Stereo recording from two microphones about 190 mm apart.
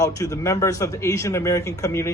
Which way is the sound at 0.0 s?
15° left (ahead or behind).